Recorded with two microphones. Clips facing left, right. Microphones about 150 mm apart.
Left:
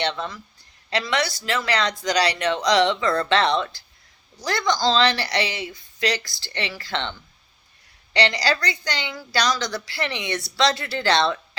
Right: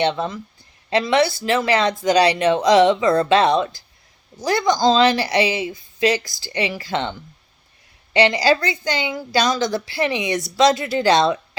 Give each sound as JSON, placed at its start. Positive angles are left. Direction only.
{"t": 0.0, "sound": "a woman's voice", "side_deg": -20}
{"t": 8.1, "sound": "a woman's voice", "side_deg": -20}